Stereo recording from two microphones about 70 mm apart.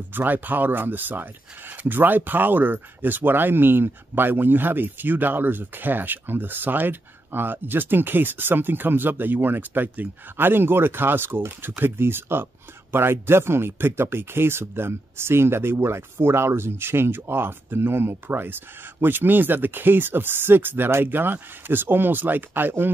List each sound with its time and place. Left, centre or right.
0.1 s speech: right